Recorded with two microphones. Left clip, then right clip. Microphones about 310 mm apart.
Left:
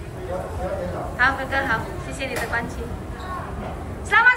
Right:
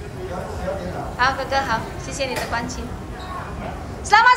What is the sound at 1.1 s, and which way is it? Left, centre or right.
A woman's voice, centre.